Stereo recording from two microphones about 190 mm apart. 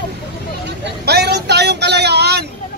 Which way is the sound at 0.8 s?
60° right (ahead or behind).